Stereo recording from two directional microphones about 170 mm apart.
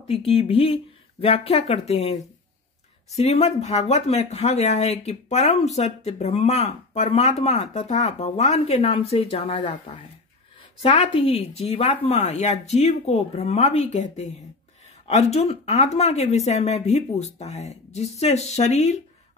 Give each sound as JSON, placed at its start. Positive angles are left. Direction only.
{"t": 0.3, "sound": "speech", "side_deg": 35}